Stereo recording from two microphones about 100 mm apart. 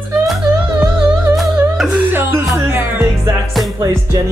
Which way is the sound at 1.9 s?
20° right (ahead or behind).